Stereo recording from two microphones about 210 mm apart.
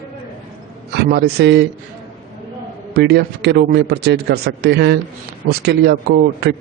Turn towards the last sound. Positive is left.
turn(degrees=-50)  # may be behind; listen again after turning